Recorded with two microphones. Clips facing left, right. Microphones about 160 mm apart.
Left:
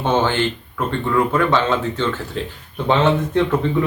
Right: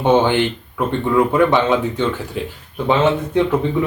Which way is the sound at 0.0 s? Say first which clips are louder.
Right 4 dB; 15° right (ahead or behind).